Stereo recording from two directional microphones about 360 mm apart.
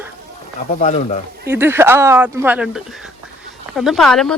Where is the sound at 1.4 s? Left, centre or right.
Centre.